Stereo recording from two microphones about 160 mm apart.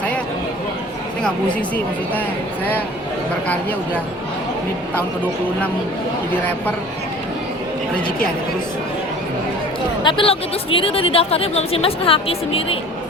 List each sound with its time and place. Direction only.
1.2 s speech: 10° left (ahead or behind)
3.5 s speech: 10° left (ahead or behind)
10.0 s speech: 30° left (ahead or behind)